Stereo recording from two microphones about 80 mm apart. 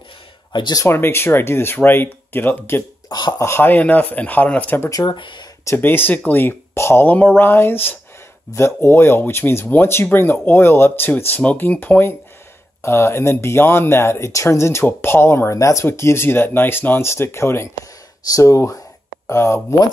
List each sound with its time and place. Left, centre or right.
0.5 s speech: left
0.8 s speech: left
3.1 s speech: left
3.3 s speech: left
5.0 s speech: left
5.8 s speech: left